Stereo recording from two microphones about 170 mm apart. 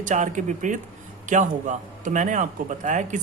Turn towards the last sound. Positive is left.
turn(degrees=-45)  # may be behind; listen again after turning